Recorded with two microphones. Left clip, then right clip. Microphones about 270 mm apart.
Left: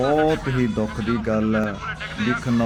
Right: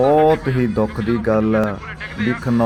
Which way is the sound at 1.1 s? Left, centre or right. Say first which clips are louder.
Right 5 dB; centre.